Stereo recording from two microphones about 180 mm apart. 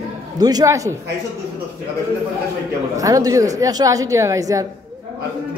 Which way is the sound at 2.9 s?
20° right (ahead or behind).